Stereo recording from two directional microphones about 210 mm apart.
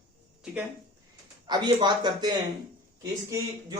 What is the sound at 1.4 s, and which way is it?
Speech, 20° right (ahead or behind).